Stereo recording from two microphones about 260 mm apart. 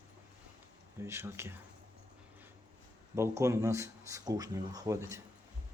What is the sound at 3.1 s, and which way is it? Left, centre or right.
Speech, centre.